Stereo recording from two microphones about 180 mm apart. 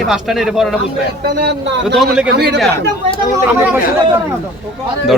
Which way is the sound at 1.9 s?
Centre (ahead or behind).